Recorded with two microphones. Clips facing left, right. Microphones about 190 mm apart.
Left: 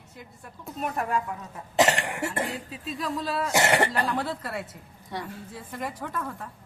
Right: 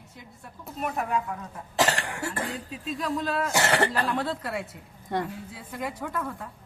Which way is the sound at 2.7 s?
Centre (ahead or behind).